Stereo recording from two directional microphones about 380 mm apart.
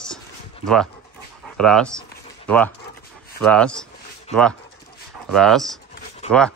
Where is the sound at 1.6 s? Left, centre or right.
Centre.